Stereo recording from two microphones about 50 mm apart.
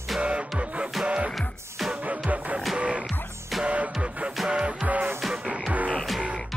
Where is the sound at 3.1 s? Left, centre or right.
Centre.